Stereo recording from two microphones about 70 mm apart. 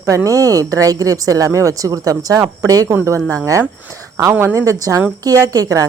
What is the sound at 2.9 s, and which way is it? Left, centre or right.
Speech, right.